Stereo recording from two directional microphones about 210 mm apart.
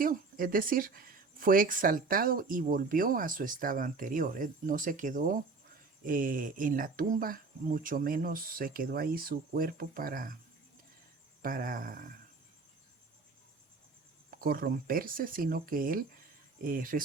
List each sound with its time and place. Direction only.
0.0 s speech: 40° right (ahead or behind)
11.4 s speech: 40° right (ahead or behind)
14.3 s speech: 45° right (ahead or behind)